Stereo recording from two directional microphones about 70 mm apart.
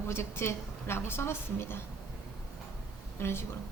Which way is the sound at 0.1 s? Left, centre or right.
Left.